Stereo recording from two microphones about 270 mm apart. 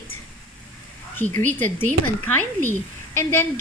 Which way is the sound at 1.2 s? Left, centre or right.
Right.